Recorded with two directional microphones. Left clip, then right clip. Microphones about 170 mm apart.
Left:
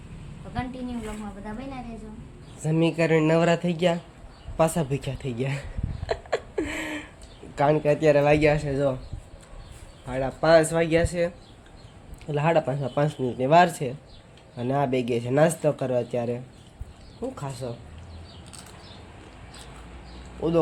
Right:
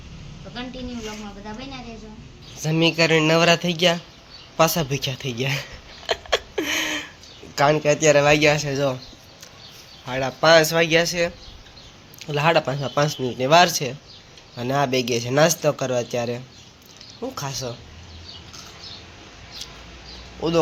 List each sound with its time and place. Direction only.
2.6 s a man's voice: centre (ahead or behind)
6.1 s a sound: centre (ahead or behind)
7.5 s a man's voice: centre (ahead or behind)
10.1 s a man's voice: 10° right (ahead or behind)